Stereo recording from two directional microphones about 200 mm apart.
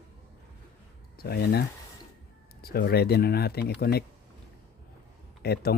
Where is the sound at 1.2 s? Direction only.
50° left (ahead or behind).